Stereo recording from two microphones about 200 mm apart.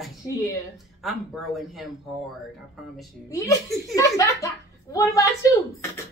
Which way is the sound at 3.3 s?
15° left (ahead or behind).